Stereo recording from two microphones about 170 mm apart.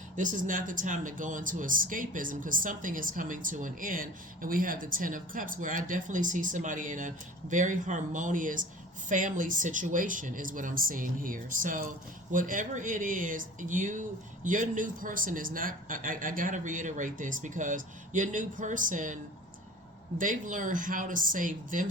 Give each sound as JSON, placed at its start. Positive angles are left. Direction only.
{"t": 0.2, "sound": "speech", "side_deg": -50}